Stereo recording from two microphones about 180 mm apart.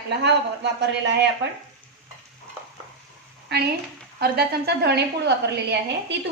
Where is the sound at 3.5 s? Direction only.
65° right (ahead or behind).